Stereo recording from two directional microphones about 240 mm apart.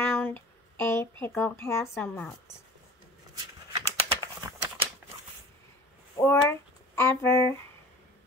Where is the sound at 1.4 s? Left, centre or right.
Centre.